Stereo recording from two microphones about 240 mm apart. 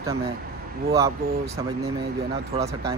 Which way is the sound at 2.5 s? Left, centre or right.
Right.